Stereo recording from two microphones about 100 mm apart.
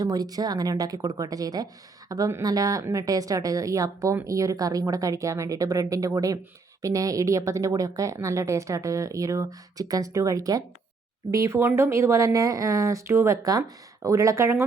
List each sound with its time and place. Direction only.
0.0 s speech: 40° right (ahead or behind)